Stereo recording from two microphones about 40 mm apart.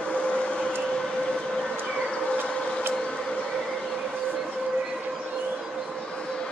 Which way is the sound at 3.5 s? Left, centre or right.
Centre.